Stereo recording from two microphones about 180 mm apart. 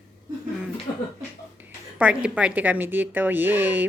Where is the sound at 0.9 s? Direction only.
20° left (ahead or behind).